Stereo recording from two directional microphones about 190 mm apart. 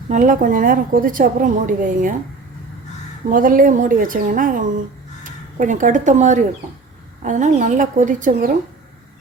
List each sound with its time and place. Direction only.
0.1 s a woman's voice: 40° right (ahead or behind)
3.2 s a woman's voice: 45° right (ahead or behind)